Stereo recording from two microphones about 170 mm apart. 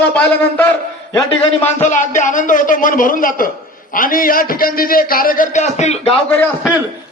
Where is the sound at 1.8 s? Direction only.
45° left (ahead or behind).